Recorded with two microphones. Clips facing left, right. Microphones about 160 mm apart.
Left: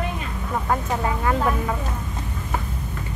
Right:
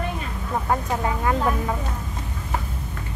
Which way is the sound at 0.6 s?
20° right (ahead or behind).